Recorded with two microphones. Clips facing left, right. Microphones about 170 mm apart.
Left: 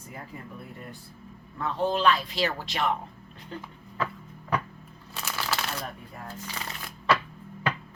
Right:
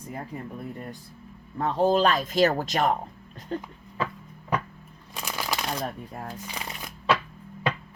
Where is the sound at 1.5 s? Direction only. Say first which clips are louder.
Right 5 dB; 40° right (ahead or behind).